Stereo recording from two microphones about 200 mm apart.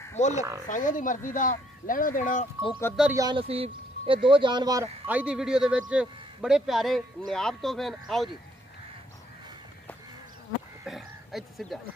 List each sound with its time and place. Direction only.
0.3 s speech: 15° right (ahead or behind)
0.7 s speech: 40° left (ahead or behind)
3.0 s speech: 10° right (ahead or behind)
3.3 s speech: 30° right (ahead or behind)
5.0 s a man's voice: 5° right (ahead or behind)
10.9 s a sound: centre (ahead or behind)